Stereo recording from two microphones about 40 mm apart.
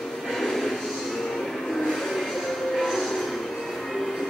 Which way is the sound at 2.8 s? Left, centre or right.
Centre.